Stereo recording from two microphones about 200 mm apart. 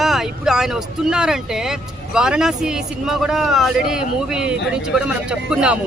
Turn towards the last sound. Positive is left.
turn(degrees=-5)  # may be behind; listen again after turning